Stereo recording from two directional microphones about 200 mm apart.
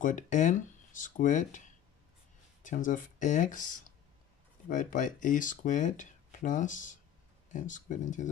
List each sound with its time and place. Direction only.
0.0 s speech: 40° left (ahead or behind)